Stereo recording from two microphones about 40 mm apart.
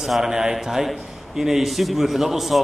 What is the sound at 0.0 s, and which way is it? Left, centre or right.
A man's voice, centre.